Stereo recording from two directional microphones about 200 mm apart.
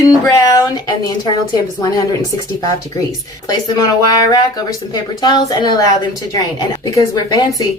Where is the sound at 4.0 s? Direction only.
20° left (ahead or behind).